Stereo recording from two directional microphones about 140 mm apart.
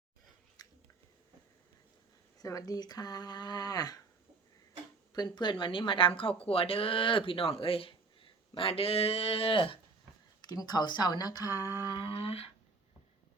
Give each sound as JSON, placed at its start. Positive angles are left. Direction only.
{"t": 0.6, "sound": "biting", "side_deg": 25}
{"t": 2.4, "sound": "speech", "side_deg": 25}
{"t": 5.1, "sound": "speech", "side_deg": 30}
{"t": 10.4, "sound": "speech", "side_deg": 30}